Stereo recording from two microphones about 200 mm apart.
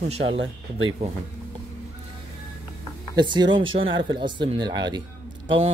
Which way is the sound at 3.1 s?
20° right (ahead or behind).